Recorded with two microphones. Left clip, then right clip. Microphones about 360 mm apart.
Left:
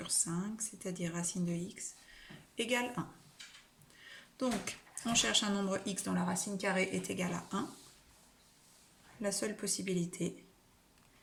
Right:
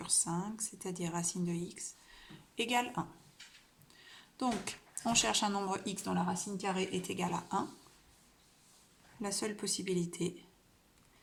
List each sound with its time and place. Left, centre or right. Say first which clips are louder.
0.0 s speech: right 2 dB; centre
9.2 s speech: left 1 dB; centre